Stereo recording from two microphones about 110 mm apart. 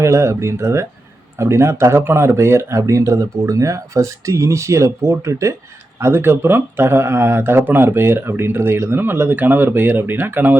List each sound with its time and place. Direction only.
0.0 s speech: 25° right (ahead or behind)